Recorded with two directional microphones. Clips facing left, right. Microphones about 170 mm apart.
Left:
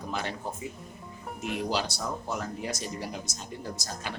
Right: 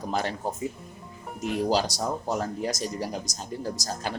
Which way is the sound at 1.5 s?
40° right (ahead or behind).